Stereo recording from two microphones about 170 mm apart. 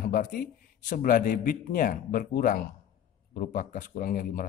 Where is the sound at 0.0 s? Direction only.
55° left (ahead or behind).